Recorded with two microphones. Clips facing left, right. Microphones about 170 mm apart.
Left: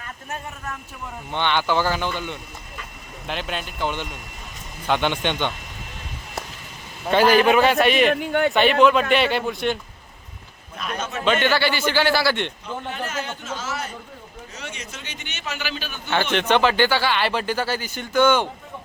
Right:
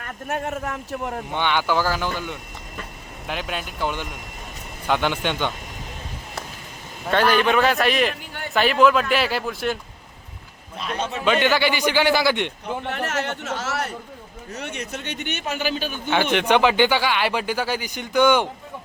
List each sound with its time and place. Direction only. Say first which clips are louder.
0.0 s a man's voice: right 6 dB; 60° right (ahead or behind); by 1.2 s 80° right
1.3 s speech: left 1 dB; 10° right (ahead or behind)
7.1 s a man's voice: left 3 dB; 10° left (ahead or behind)
8.1 s speech: left 14 dB; 60° left (ahead or behind)
8.5 s speech: right 1 dB; centre (ahead or behind)
10.8 s a man's voice: right 2 dB; 30° right (ahead or behind)
11.3 s speech: right 1 dB; 15° right (ahead or behind)
12.9 s speech: right 4 dB; 75° right (ahead or behind)
14.5 s a man's voice: right 7 dB; 60° right (ahead or behind)
16.0 s speech: right 1 dB; 15° right (ahead or behind)